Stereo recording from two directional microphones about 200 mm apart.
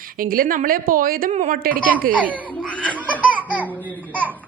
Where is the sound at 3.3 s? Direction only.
10° right (ahead or behind).